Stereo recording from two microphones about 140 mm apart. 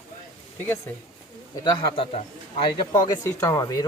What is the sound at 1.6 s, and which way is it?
A man's voice, 40° left (ahead or behind).